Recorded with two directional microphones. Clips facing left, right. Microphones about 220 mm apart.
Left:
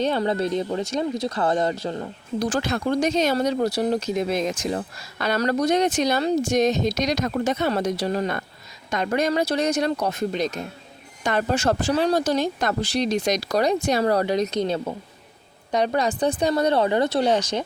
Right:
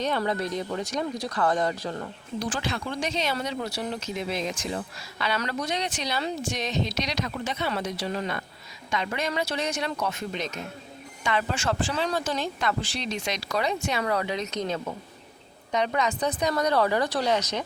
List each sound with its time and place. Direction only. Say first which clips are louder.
0.0 s speech: left 5 dB; 30° left (ahead or behind)
2.4 s speech: left 7 dB; 45° left (ahead or behind)